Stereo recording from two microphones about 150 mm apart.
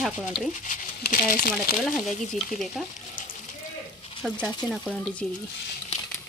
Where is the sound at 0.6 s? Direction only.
60° left (ahead or behind).